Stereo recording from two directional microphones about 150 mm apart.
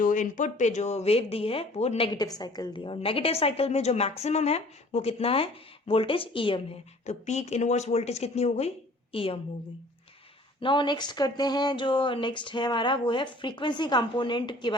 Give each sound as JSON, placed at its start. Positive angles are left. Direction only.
{"t": 0.0, "sound": "speech", "side_deg": 60}
{"t": 2.0, "sound": "speech", "side_deg": 25}
{"t": 7.0, "sound": "speech", "side_deg": 50}
{"t": 10.6, "sound": "speech", "side_deg": 30}